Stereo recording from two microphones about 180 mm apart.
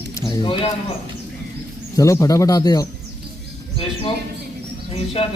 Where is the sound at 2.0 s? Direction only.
15° left (ahead or behind).